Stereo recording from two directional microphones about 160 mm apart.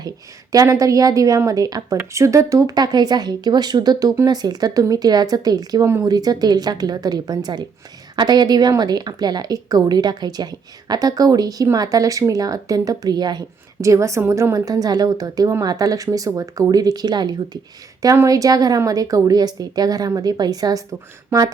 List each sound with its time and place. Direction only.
0.5 s a woman's voice: 20° right (ahead or behind)